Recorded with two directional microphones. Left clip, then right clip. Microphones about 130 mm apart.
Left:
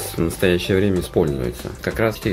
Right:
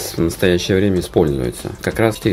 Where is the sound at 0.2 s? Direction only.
30° right (ahead or behind).